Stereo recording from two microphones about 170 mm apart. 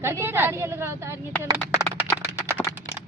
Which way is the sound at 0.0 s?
15° right (ahead or behind).